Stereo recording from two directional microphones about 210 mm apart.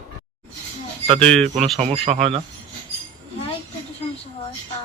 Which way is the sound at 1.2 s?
5° left (ahead or behind).